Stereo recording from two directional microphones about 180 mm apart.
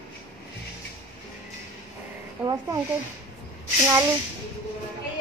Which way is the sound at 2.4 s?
20° right (ahead or behind).